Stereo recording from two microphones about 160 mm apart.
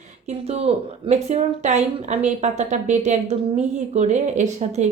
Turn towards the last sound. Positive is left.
turn(degrees=-45)  # may be behind; listen again after turning